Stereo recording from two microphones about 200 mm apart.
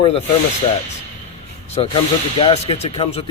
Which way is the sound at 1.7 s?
30° left (ahead or behind).